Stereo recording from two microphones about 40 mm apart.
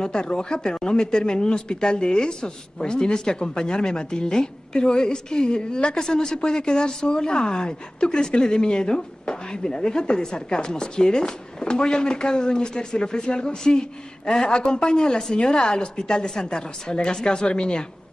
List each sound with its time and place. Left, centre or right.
0.0 s a woman's voice: left